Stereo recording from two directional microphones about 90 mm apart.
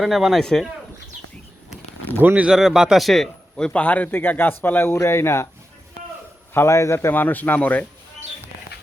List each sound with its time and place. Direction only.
0.0 s a man's voice: centre (ahead or behind)
2.1 s a man's voice: 20° right (ahead or behind); by 3.7 s centre (ahead or behind)
3.7 s a man's voice: 15° left (ahead or behind)
6.5 s a man's voice: 30° left (ahead or behind)